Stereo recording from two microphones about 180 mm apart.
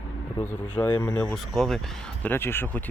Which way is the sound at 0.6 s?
10° left (ahead or behind).